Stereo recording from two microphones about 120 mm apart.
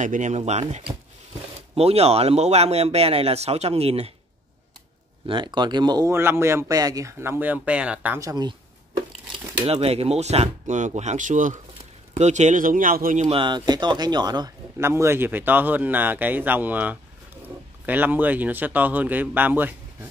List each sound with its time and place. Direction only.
0.0 s speech: 90° right
0.5 s speech: 65° right (ahead or behind)
5.2 s speech: 40° right (ahead or behind)
6.1 s speech: 20° right (ahead or behind)
8.2 s speech: 35° right (ahead or behind)
9.7 s speech: 55° right (ahead or behind); by 13.3 s 90° right
13.3 s speech: 40° right (ahead or behind)
14.8 s speech: 20° right (ahead or behind)